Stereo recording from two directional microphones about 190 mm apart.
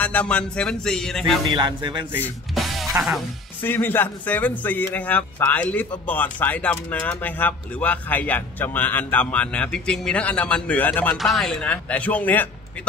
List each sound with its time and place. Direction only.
0.0 s music: 5° left (ahead or behind)
1.5 s speech: 25° right (ahead or behind)
2.2 s music: centre (ahead or behind)
3.6 s speech: 10° left (ahead or behind)